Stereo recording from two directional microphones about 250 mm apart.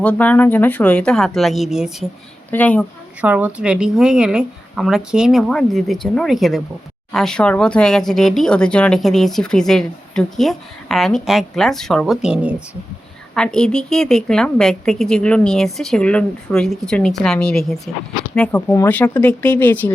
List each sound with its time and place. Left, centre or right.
0.0 s speech: centre
3.2 s speech: centre